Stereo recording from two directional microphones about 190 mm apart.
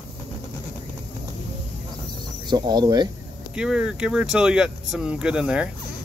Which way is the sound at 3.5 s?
5° right (ahead or behind).